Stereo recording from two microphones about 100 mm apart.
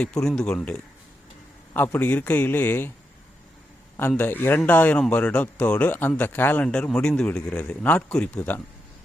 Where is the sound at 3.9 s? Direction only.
20° left (ahead or behind).